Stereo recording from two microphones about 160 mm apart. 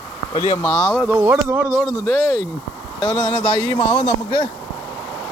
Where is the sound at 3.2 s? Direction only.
30° right (ahead or behind).